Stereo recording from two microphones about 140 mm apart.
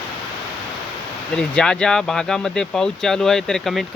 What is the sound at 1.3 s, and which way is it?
Speech, 5° left (ahead or behind).